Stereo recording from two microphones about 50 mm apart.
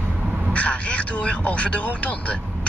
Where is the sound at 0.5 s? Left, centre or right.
Left.